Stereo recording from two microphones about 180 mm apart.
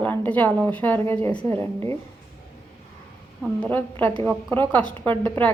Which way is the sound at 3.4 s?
10° left (ahead or behind).